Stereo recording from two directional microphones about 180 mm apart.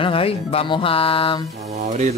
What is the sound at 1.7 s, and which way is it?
Speech, 40° right (ahead or behind).